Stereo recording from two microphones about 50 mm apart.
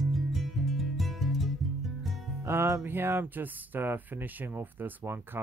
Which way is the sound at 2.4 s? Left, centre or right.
Right.